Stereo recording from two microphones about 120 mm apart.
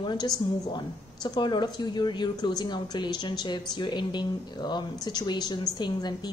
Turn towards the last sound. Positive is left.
turn(degrees=35)  # may be behind; listen again after turning